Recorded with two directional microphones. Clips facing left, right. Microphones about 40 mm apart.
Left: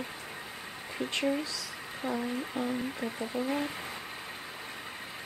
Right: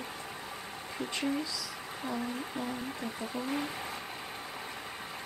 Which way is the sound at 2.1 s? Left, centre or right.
Centre.